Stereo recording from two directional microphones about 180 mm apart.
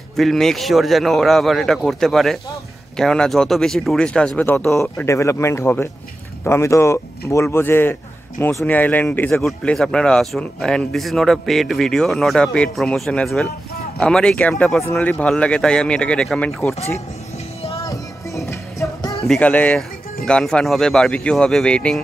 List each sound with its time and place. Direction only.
0.2 s speech: centre (ahead or behind)
17.8 s music: 15° left (ahead or behind)
19.2 s speech: 5° left (ahead or behind)